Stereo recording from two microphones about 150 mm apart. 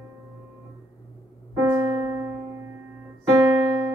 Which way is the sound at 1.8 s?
10° right (ahead or behind).